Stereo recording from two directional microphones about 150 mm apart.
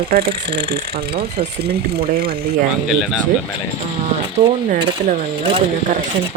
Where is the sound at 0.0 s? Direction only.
90° right.